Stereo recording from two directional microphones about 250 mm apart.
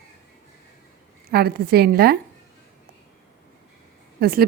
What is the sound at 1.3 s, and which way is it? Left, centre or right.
Speech, right.